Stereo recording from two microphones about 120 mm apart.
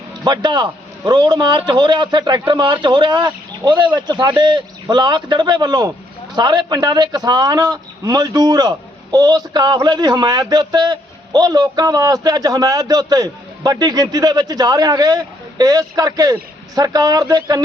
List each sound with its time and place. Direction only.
0.3 s a man's voice: 35° right (ahead or behind)